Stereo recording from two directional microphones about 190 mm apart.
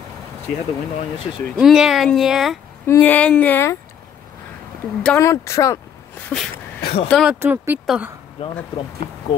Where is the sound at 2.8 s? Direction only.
10° left (ahead or behind).